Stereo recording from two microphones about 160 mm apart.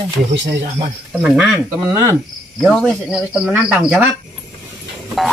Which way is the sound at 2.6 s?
Centre (ahead or behind).